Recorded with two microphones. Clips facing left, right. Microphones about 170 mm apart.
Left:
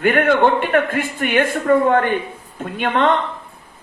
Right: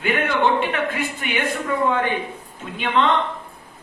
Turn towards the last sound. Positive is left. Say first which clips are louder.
# left 3 dB
turn(degrees=50)  # may be behind; listen again after turning